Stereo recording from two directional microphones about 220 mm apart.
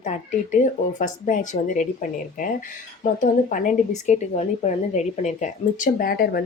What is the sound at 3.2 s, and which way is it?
Speech, 40° left (ahead or behind).